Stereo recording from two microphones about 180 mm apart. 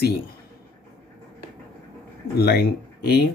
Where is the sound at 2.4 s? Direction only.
60° left (ahead or behind).